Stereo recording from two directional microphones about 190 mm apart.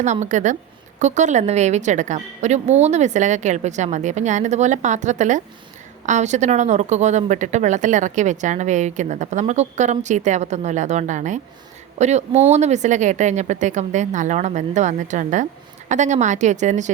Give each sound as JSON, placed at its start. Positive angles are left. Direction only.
{"t": 0.0, "sound": "speech", "side_deg": -40}